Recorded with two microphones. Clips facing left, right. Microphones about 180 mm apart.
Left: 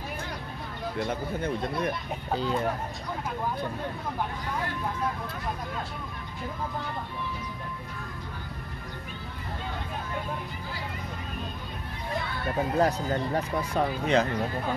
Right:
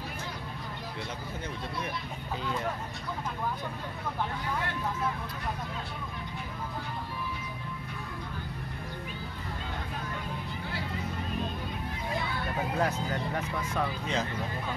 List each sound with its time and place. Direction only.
0.9 s speech: 55° left (ahead or behind)
12.7 s speech: 35° left (ahead or behind)
13.8 s speech: 60° left (ahead or behind)